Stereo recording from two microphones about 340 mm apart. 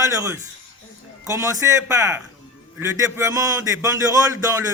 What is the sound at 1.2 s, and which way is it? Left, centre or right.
A man's voice, centre.